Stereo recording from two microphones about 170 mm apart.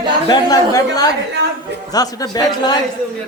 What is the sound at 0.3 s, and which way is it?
Speech, 20° left (ahead or behind).